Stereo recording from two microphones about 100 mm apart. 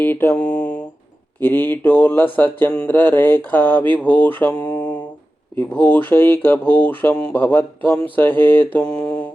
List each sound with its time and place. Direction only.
0.0 s mantra: 20° left (ahead or behind)
1.4 s speech: 20° left (ahead or behind)
8.8 s mantra: 10° left (ahead or behind)